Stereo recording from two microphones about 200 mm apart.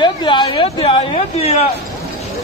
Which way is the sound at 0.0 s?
25° left (ahead or behind).